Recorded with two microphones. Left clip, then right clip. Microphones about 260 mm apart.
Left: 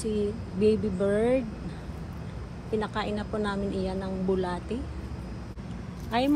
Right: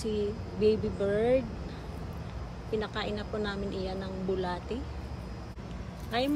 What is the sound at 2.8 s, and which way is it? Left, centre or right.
Speech, centre.